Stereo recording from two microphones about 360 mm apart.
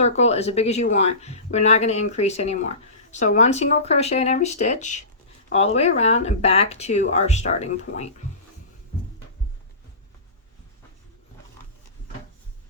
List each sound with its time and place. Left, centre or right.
0.0 s speech: centre